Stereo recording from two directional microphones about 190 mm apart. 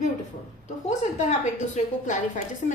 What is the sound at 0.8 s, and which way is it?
A woman's voice, 35° left (ahead or behind).